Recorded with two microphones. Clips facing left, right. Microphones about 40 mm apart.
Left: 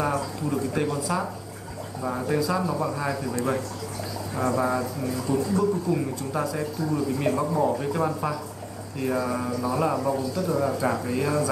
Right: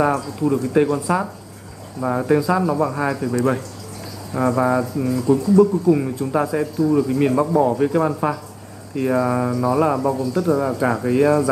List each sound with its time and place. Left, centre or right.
0.0 s speech: centre
4.4 s speech: centre